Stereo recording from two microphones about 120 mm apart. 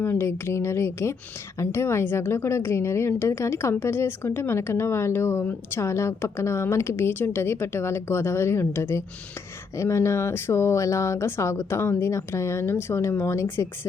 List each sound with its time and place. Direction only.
0.0 s a woman's voice: 20° left (ahead or behind)